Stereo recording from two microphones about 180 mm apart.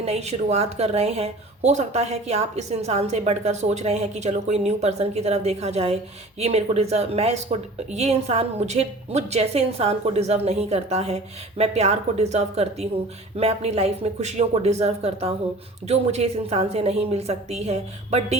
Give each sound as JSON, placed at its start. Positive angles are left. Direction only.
{"t": 0.0, "sound": "a woman's voice", "side_deg": -35}